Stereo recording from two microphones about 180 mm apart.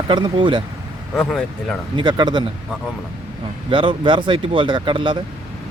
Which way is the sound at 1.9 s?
25° right (ahead or behind).